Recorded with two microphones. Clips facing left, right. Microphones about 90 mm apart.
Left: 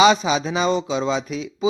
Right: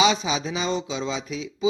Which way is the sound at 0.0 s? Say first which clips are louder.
Left 6 dB; 55° left (ahead or behind).